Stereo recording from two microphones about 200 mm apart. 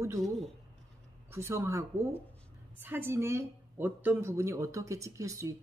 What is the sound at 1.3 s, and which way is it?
A woman's voice, 15° right (ahead or behind).